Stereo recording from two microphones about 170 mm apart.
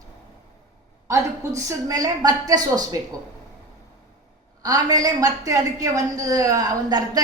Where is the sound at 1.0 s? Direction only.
15° right (ahead or behind).